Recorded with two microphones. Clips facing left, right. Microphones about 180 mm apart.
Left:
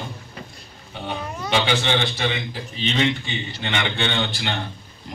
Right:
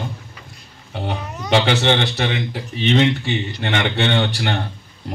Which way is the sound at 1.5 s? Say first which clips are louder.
Right 5 dB; 65° right (ahead or behind).